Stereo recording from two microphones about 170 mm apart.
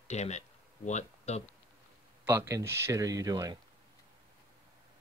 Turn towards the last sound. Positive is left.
turn(degrees=-20)  # may be behind; listen again after turning